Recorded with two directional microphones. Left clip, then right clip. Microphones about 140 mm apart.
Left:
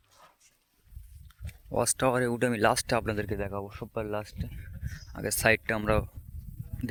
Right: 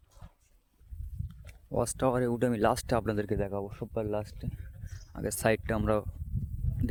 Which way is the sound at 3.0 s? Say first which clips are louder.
Right 1 dB; 35° right (ahead or behind).